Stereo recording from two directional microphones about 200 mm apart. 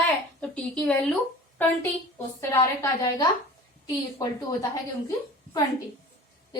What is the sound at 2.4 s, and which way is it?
Speech, 15° left (ahead or behind).